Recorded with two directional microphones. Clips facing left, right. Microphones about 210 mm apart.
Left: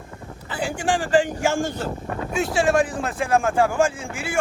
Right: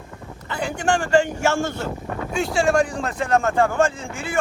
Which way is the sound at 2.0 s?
Centre (ahead or behind).